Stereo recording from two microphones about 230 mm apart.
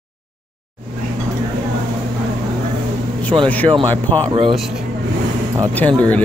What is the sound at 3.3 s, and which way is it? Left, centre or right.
Speech, centre.